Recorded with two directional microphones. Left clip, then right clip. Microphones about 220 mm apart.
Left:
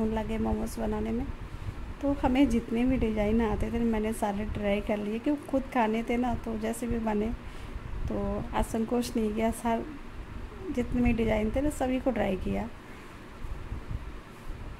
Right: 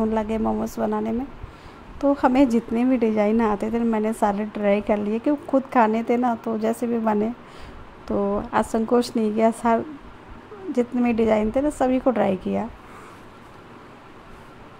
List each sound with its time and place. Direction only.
0.1 s a woman's voice: 10° right (ahead or behind)